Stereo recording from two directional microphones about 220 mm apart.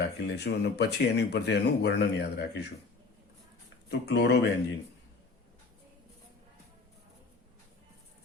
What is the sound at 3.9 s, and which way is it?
Speech, 50° left (ahead or behind).